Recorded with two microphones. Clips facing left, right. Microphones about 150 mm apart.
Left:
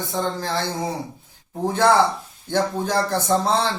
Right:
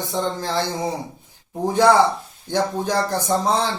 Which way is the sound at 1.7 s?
15° right (ahead or behind).